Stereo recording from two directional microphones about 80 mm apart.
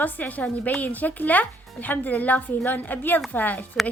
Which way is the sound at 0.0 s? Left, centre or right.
Left.